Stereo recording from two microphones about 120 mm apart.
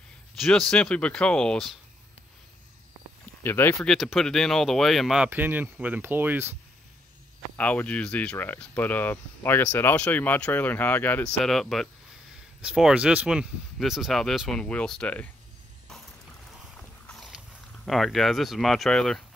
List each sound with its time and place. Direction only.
0.4 s speech: 5° left (ahead or behind)
3.4 s speech: 15° left (ahead or behind)
3.8 s speech: centre (ahead or behind); by 6.5 s 20° right (ahead or behind)
7.5 s speech: 10° left (ahead or behind)
11.3 s speech: 5° left (ahead or behind)
17.1 s dog: centre (ahead or behind)
17.8 s speech: centre (ahead or behind)